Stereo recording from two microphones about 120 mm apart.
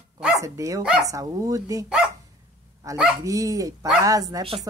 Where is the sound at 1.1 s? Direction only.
30° right (ahead or behind).